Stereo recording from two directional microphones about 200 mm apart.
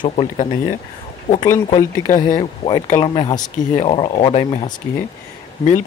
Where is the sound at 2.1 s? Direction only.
40° left (ahead or behind).